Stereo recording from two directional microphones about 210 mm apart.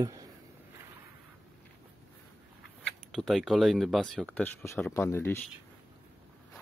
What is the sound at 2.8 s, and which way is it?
Speech, centre (ahead or behind).